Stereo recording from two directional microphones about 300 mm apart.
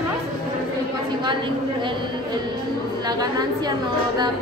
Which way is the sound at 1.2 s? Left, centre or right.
Centre.